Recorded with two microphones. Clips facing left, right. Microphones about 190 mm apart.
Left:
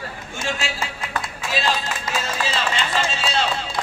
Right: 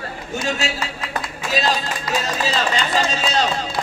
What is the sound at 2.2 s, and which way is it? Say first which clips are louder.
A man's voice: right 2 dB; 40° right (ahead or behind).